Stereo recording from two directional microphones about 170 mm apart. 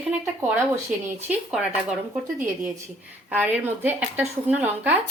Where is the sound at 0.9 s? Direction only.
5° right (ahead or behind).